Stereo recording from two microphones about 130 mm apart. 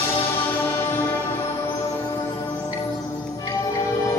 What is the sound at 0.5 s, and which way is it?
Music, 15° left (ahead or behind).